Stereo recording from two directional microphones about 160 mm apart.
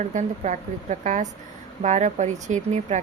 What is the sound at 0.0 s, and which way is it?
Speech, 50° right (ahead or behind).